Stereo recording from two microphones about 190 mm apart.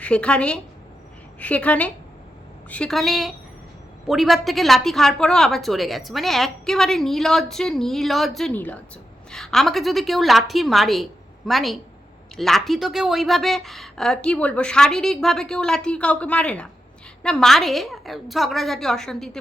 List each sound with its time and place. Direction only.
0.0 s a woman's voice: 5° left (ahead or behind)